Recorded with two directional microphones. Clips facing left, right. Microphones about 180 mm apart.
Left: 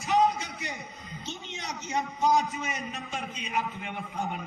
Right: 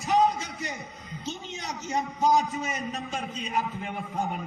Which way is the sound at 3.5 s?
35° right (ahead or behind).